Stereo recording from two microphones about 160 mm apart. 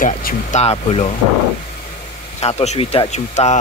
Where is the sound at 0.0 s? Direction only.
55° left (ahead or behind).